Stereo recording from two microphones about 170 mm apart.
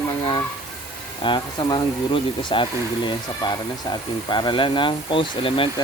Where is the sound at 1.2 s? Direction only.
25° left (ahead or behind).